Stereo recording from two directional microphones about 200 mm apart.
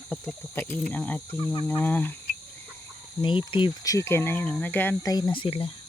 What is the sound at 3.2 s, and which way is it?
Speech, 25° left (ahead or behind).